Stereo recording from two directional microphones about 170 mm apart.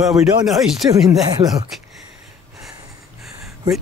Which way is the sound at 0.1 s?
20° right (ahead or behind).